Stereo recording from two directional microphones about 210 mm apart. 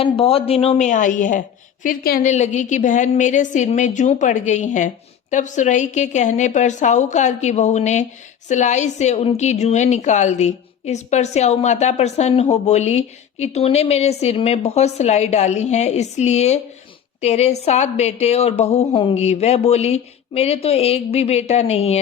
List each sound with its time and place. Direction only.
0.0 s a woman's voice: 25° left (ahead or behind)